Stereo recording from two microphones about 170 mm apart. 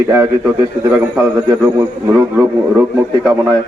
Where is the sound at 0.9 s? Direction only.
10° right (ahead or behind).